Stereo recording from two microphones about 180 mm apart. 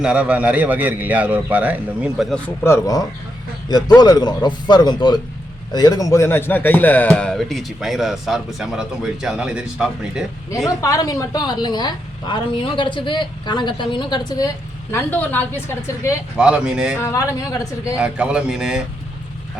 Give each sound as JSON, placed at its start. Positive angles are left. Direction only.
{"t": 0.0, "sound": "a man's voice", "side_deg": -5}
{"t": 2.6, "sound": "a woman's voice", "side_deg": 15}
{"t": 10.8, "sound": "a woman's voice", "side_deg": 20}
{"t": 14.9, "sound": "a woman's voice", "side_deg": 10}
{"t": 16.4, "sound": "speech", "side_deg": -5}
{"t": 17.0, "sound": "a woman's voice", "side_deg": 15}
{"t": 17.9, "sound": "speech", "side_deg": -5}